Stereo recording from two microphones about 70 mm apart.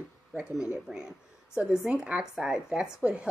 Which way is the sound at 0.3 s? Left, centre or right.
Centre.